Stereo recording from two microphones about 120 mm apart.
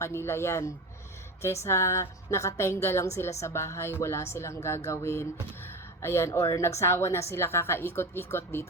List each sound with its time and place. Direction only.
0.0 s speech: 20° left (ahead or behind)